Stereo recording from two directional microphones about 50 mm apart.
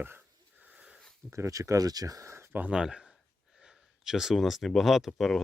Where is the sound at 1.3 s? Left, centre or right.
Right.